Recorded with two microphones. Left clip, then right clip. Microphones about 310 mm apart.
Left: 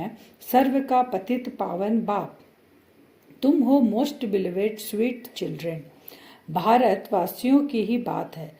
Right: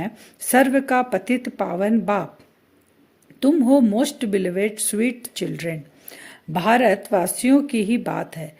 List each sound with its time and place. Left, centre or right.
0.5 s speech: right
3.4 s speech: right